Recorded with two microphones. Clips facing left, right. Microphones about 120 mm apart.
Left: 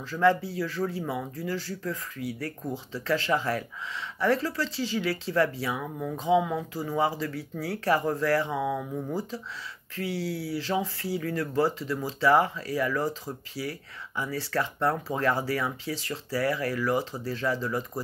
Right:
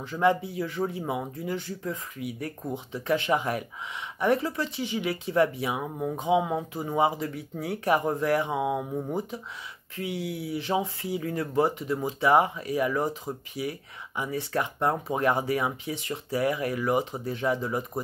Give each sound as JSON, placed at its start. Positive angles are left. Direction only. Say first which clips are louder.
{"t": 0.0, "sound": "speech", "louder": "left 1 dB", "side_deg": -20}